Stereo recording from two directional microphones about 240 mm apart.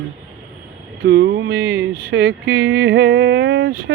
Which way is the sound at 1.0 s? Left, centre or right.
Right.